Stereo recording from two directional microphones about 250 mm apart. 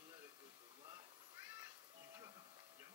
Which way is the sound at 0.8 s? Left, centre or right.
Centre.